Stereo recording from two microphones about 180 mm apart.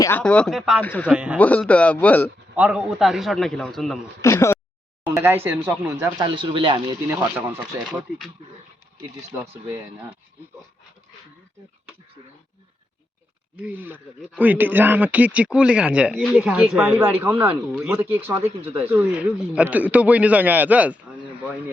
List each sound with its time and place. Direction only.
0.0 s a man's voice: 10° left (ahead or behind)
0.8 s speech: 10° left (ahead or behind)
1.1 s speech: 5° right (ahead or behind)
1.4 s speech: 10° left (ahead or behind)
2.6 s a man's voice: 5° right (ahead or behind)
4.2 s speech: 15° left (ahead or behind)
5.0 s speech: 15° right (ahead or behind)
6.1 s speech: 25° right (ahead or behind)
7.1 s speech: 10° right (ahead or behind)
9.4 s speech: 15° right (ahead or behind)
13.6 s speech: 10° right (ahead or behind)